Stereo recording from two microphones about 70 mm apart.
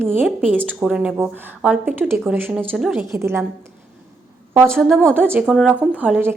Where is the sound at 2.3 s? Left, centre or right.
Right.